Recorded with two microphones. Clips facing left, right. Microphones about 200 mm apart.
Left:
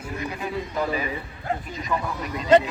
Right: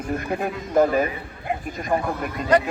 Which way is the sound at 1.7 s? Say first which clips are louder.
Right 4 dB; 50° right (ahead or behind).